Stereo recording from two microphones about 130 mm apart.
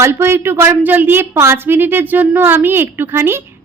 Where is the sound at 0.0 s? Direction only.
20° right (ahead or behind).